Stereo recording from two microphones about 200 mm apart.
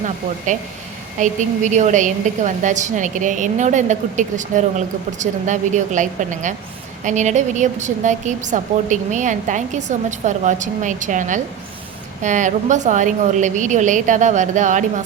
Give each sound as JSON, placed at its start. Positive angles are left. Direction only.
{"t": 1.2, "sound": "a woman's voice", "side_deg": -35}